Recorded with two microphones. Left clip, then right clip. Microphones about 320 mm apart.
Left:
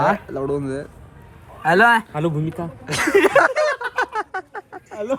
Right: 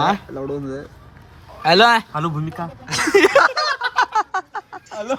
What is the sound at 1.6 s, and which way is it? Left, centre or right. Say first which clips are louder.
Speech: right 1 dB; right.